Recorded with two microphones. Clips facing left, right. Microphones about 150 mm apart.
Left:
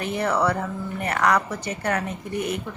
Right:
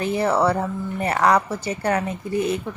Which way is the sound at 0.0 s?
30° right (ahead or behind).